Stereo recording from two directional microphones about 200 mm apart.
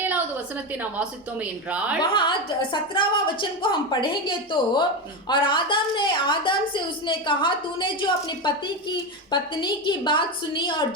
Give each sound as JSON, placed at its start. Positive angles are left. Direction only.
{"t": 0.7, "sound": "a woman's voice", "side_deg": -5}
{"t": 2.0, "sound": "a woman's voice", "side_deg": 25}